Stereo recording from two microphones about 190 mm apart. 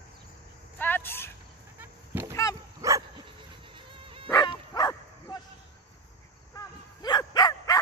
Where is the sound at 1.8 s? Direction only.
10° right (ahead or behind).